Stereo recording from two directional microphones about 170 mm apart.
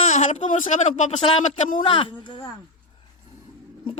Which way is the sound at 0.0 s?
45° left (ahead or behind).